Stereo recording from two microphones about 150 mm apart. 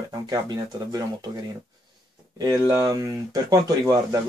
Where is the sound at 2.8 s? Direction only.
25° right (ahead or behind).